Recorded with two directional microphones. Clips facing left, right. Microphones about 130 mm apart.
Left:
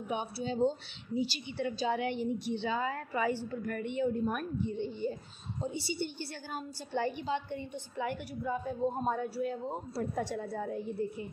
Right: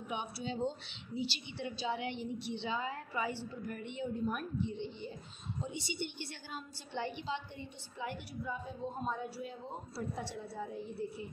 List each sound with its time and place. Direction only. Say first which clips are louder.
0.1 s a woman's voice: left 5 dB; 40° left (ahead or behind)
5.6 s a woman's voice: left 5 dB; 35° left (ahead or behind)
6.5 s a woman's voice: left 7 dB; 45° left (ahead or behind)